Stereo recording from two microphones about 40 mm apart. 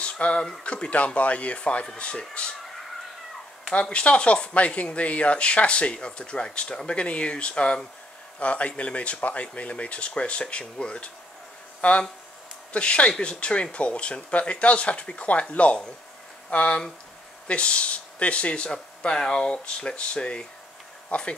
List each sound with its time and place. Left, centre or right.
0.0 s speech: left
3.9 s speech: left
11.8 s speech: left